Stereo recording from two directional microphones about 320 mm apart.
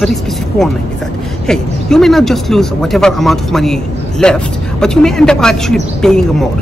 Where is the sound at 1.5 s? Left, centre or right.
Centre.